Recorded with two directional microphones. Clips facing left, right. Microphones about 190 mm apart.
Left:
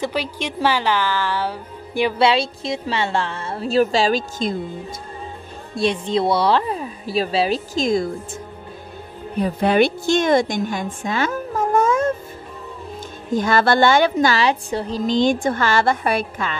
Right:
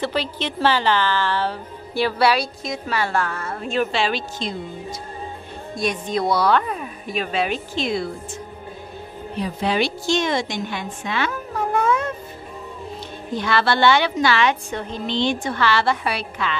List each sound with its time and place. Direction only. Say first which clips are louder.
0.0 s a woman's voice: even; 10° left (ahead or behind); by 4.6 s 45° left (ahead or behind)
5.8 s a woman's voice: left 4 dB; 30° left (ahead or behind)
9.4 s a woman's voice: left 6 dB; 55° left (ahead or behind)
13.3 s a woman's voice: left 4 dB; 45° left (ahead or behind)